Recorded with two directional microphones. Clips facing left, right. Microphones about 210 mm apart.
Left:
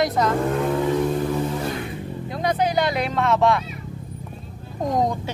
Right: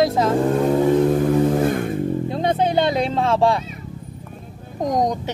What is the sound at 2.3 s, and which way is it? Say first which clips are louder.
Speech: even; 25° right (ahead or behind).